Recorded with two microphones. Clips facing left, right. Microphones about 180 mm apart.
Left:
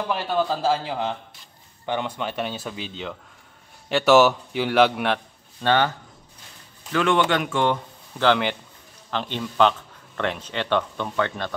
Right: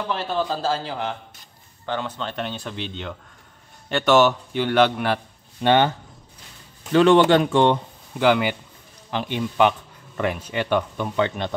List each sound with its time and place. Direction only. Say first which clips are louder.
0.1 s a man's voice: left 1 dB; 15° left (ahead or behind)
5.6 s speech: right 3 dB; 20° right (ahead or behind)
6.9 s speech: right 6 dB; 30° right (ahead or behind)
8.2 s speech: right 2 dB; 10° right (ahead or behind)